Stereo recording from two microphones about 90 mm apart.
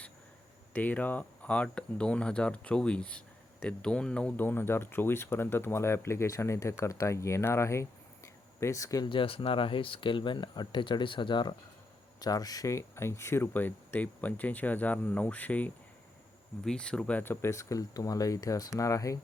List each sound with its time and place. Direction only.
0.7 s speech: 15° left (ahead or behind)
4.4 s speech: 25° left (ahead or behind)
9.0 s speech: 80° left; by 11.5 s 60° left (ahead or behind)
12.2 s speech: 45° left (ahead or behind); by 17.2 s 10° left (ahead or behind)
17.2 s speech: 25° left (ahead or behind)